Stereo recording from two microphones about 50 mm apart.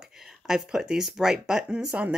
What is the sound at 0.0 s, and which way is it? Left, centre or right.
Speech, centre.